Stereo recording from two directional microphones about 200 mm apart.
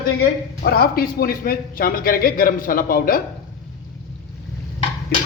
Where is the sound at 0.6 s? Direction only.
50° left (ahead or behind).